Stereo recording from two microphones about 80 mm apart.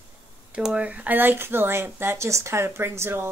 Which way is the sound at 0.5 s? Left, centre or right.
Centre.